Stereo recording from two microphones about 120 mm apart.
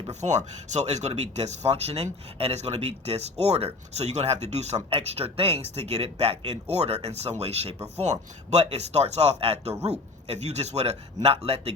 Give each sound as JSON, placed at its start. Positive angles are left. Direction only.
{"t": 0.1, "sound": "speech", "side_deg": -75}